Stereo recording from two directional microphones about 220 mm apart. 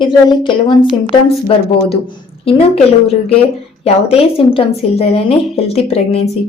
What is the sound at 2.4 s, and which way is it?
A woman's voice, 25° left (ahead or behind).